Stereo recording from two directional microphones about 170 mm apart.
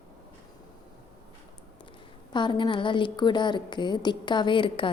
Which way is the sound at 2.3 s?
25° left (ahead or behind).